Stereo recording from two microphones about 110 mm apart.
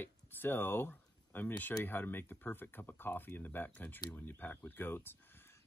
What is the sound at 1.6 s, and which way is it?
Speech, 15° left (ahead or behind).